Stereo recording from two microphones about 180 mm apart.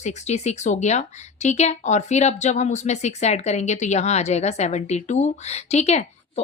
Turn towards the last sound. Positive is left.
turn(degrees=40)  # may be behind; listen again after turning